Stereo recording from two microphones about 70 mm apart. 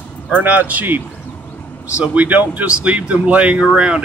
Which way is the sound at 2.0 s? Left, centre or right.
Centre.